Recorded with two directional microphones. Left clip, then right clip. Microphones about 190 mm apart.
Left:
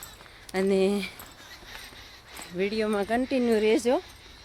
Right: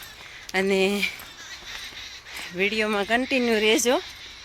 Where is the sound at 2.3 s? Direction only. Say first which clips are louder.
Right 4 dB; centre (ahead or behind).